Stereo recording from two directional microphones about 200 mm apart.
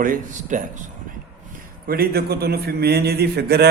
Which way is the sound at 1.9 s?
50° right (ahead or behind).